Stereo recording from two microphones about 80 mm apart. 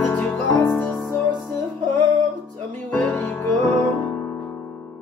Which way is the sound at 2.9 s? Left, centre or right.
Centre.